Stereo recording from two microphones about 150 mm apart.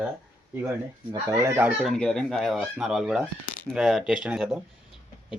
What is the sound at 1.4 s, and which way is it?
Speech, 15° right (ahead or behind).